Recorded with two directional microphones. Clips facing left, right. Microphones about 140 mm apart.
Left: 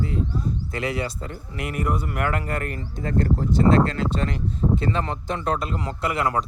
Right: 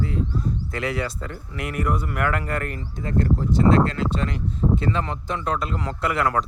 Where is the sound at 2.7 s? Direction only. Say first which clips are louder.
Even; 35° left (ahead or behind).